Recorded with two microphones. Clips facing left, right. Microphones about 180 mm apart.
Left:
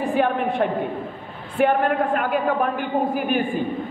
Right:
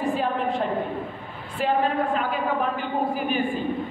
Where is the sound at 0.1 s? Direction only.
60° left (ahead or behind).